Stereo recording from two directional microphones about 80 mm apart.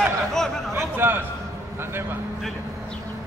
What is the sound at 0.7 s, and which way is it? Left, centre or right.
Speech, right.